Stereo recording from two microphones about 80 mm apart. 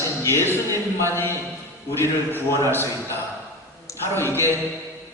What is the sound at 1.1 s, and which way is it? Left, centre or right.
A man's voice, left.